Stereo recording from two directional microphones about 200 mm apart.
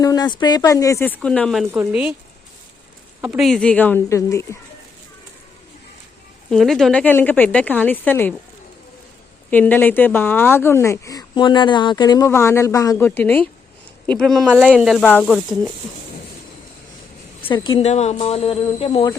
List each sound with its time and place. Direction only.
0.0 s speech: 20° left (ahead or behind); by 2.1 s 5° right (ahead or behind)
3.2 s speech: 5° right (ahead or behind); by 4.4 s 15° left (ahead or behind)
6.5 s speech: centre (ahead or behind)
9.5 s speech: 10° left (ahead or behind)
17.4 s a sound: 25° left (ahead or behind)